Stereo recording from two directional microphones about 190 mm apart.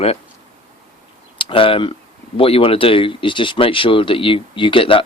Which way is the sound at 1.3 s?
25° left (ahead or behind).